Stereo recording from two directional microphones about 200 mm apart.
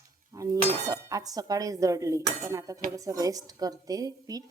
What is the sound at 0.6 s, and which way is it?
A woman's voice, 20° right (ahead or behind).